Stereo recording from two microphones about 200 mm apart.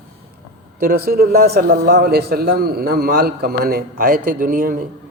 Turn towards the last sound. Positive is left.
turn(degrees=-45)  # may be behind; listen again after turning